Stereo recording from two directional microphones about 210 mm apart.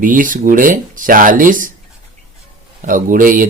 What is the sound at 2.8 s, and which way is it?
Speech, 40° right (ahead or behind).